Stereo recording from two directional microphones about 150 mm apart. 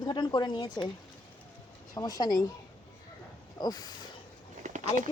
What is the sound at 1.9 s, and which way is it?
Speech, 25° left (ahead or behind).